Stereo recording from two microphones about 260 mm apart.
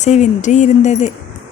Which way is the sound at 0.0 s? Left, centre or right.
Left.